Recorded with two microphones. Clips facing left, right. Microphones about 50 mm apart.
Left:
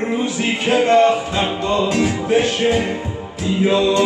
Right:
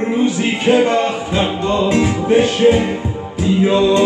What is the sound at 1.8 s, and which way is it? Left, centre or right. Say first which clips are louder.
Music: right 5 dB; right.